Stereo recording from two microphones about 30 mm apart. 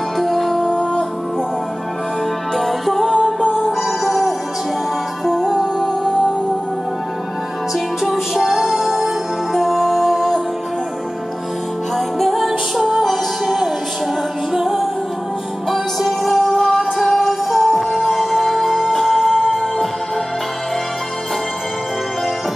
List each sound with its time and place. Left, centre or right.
0.2 s music: centre
0.7 s music: left
2.5 s music: centre
3.6 s music: centre
5.3 s music: centre
8.0 s music: centre
12.2 s music: centre
16.5 s music: centre
17.1 s music: centre